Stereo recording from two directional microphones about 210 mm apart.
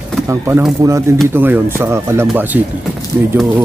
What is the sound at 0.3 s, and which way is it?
Speech, 10° right (ahead or behind).